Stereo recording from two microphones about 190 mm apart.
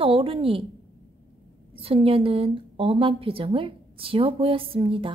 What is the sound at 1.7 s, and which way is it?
A woman's voice, 30° right (ahead or behind).